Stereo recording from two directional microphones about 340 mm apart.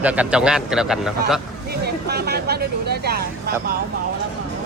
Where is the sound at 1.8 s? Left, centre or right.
Right.